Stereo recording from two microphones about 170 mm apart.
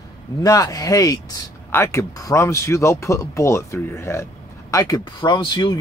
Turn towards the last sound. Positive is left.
turn(degrees=25)  # may be behind; listen again after turning